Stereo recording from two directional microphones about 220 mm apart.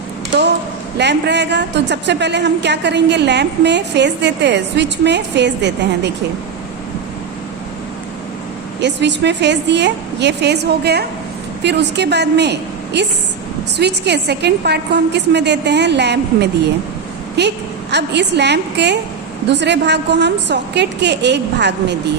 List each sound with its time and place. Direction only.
0.9 s a woman's voice: 50° right (ahead or behind)
8.8 s a woman's voice: 50° right (ahead or behind)